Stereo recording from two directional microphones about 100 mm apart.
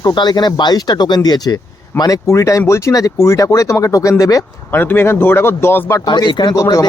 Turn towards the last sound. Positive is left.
turn(degrees=40)  # may be behind; listen again after turning